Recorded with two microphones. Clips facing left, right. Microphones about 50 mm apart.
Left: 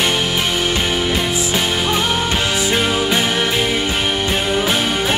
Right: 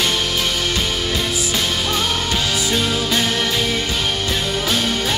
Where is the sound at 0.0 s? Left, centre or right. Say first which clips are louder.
Left 2 dB; left.